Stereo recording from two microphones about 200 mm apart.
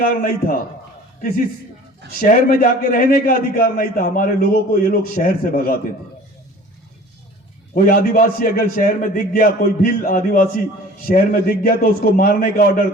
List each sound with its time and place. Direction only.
0.0 s a man's voice: 45° left (ahead or behind)
2.1 s a man's voice: 45° left (ahead or behind)
7.9 s a man's voice: 45° left (ahead or behind)